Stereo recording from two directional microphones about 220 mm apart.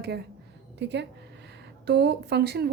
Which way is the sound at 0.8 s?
50° right (ahead or behind).